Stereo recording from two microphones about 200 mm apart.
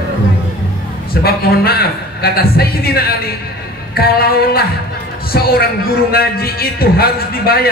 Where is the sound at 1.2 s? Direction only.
50° left (ahead or behind).